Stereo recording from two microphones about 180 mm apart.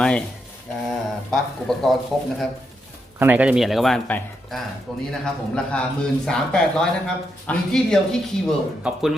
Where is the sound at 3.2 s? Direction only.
10° right (ahead or behind).